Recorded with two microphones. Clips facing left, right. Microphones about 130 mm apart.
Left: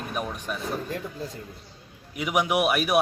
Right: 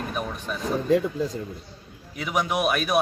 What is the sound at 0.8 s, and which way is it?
Speech, 90° right.